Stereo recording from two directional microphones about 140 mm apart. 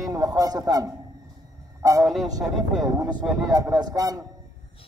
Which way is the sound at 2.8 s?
25° right (ahead or behind).